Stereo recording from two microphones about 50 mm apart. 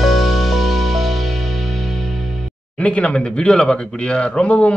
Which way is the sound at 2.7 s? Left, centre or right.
Left.